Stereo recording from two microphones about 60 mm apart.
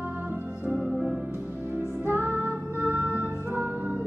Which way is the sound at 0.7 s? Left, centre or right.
Centre.